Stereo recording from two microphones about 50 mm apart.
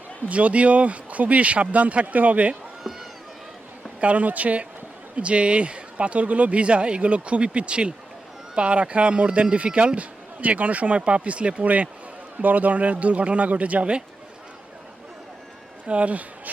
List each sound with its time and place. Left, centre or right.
0.3 s speech: right
4.0 s speech: right
15.9 s speech: right